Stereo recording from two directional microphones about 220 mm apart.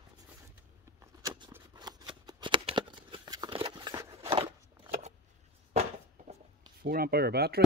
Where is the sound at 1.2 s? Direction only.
15° right (ahead or behind).